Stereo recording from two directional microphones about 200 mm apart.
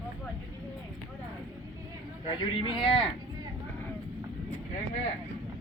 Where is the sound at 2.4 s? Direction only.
25° left (ahead or behind).